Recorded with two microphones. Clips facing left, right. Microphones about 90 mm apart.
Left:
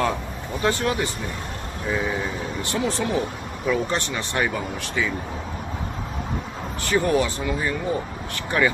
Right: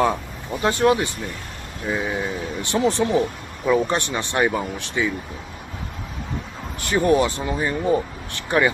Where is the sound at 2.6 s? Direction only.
25° right (ahead or behind).